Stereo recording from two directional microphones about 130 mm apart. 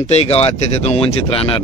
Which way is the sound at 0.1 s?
55° left (ahead or behind).